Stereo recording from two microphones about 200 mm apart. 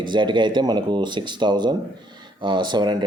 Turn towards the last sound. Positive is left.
turn(degrees=-20)  # may be behind; listen again after turning